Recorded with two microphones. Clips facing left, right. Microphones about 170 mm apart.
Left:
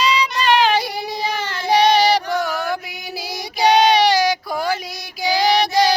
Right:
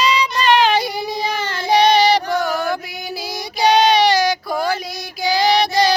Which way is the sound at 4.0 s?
15° left (ahead or behind).